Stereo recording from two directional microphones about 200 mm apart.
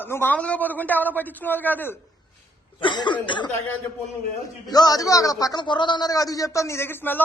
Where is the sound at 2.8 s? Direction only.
25° left (ahead or behind).